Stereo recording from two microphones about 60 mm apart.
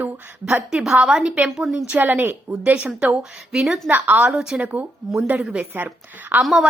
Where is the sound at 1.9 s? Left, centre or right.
Right.